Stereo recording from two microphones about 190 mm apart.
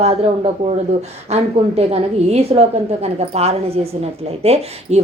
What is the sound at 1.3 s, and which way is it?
Speech, 35° right (ahead or behind).